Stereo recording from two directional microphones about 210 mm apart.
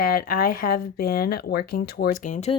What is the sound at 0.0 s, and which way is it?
Speech, 45° left (ahead or behind).